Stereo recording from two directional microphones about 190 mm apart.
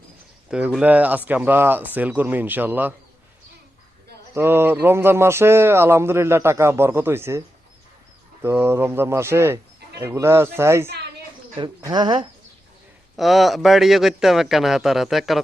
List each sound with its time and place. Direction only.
0.5 s speech: 5° right (ahead or behind)
4.4 s speech: 10° right (ahead or behind)
13.1 s a man's voice: centre (ahead or behind)